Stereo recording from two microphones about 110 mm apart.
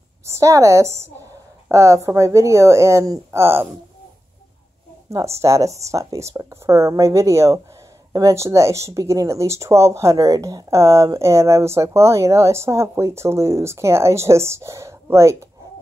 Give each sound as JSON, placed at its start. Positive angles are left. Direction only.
{"t": 0.2, "sound": "speech", "side_deg": -25}
{"t": 5.4, "sound": "speech", "side_deg": -30}